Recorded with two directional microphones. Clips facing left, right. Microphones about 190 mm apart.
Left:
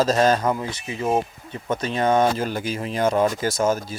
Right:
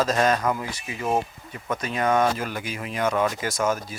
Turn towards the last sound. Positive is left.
turn(degrees=30)  # may be behind; listen again after turning